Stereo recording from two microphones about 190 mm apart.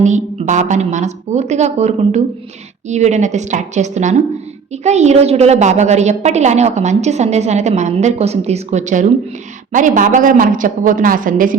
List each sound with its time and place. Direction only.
0.0 s a woman's voice: 40° right (ahead or behind)